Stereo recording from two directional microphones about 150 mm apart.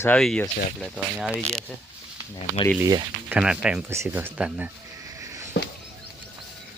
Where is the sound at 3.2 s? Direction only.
5° right (ahead or behind).